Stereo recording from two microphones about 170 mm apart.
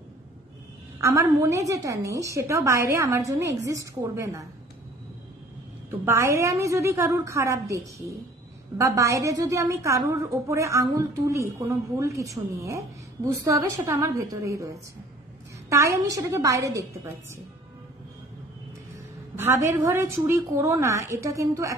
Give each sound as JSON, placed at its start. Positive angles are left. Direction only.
{"t": 1.0, "sound": "a woman's voice", "side_deg": -15}
{"t": 5.9, "sound": "a woman's voice", "side_deg": -15}
{"t": 15.7, "sound": "a woman's voice", "side_deg": -20}
{"t": 19.3, "sound": "a woman's voice", "side_deg": -15}